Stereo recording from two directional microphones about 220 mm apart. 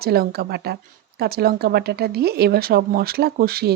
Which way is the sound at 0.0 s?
45° right (ahead or behind).